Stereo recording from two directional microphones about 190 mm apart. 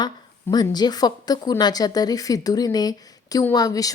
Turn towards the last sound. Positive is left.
turn(degrees=20)  # may be behind; listen again after turning